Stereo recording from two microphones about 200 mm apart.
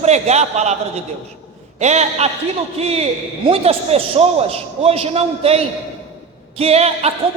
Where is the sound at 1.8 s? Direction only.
35° right (ahead or behind).